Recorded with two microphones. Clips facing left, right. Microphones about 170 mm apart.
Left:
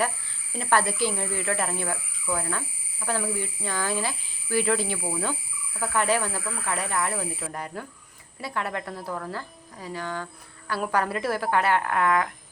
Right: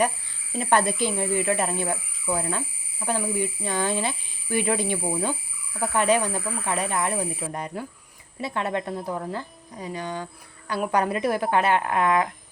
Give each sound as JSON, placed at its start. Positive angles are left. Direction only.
{"t": 0.6, "sound": "speech", "side_deg": -20}